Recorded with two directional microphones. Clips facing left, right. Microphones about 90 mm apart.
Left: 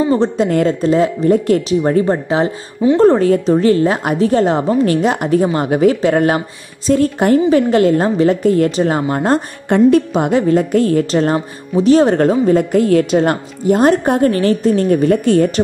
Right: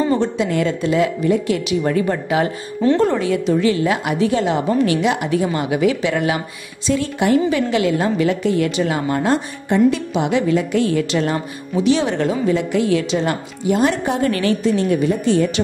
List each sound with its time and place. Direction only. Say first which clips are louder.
0.1 s a woman's voice: left 4 dB; 40° left (ahead or behind)